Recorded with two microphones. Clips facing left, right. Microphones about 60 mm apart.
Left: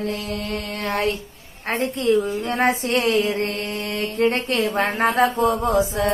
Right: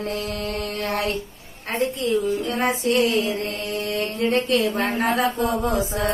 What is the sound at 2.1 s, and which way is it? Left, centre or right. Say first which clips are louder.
Speech: left 5 dB; left.